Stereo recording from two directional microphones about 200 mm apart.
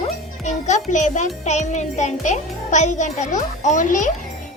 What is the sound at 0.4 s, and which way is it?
A child's voice, 35° left (ahead or behind).